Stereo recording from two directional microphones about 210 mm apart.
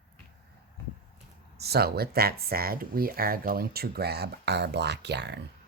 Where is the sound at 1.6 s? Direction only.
50° right (ahead or behind).